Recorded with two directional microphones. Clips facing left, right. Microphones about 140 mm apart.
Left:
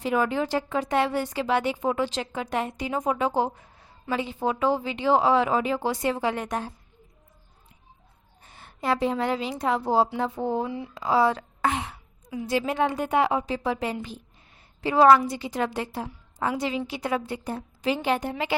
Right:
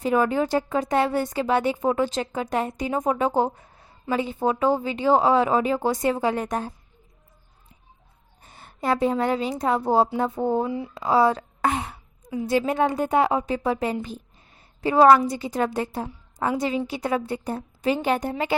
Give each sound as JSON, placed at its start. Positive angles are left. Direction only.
{"t": 0.0, "sound": "a woman's voice", "side_deg": -45}
{"t": 8.4, "sound": "a woman's voice", "side_deg": -40}